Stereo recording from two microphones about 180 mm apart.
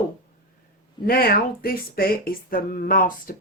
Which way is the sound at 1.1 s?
55° left (ahead or behind).